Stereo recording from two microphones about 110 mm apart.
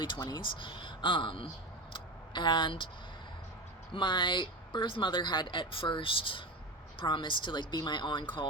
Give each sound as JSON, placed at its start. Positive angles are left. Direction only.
{"t": 0.3, "sound": "speech", "side_deg": 45}
{"t": 1.9, "sound": "a sound", "side_deg": 45}
{"t": 3.9, "sound": "speech", "side_deg": 45}